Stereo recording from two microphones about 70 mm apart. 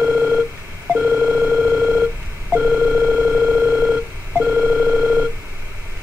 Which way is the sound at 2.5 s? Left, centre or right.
Right.